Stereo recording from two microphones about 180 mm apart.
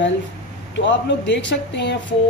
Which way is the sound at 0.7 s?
80° left.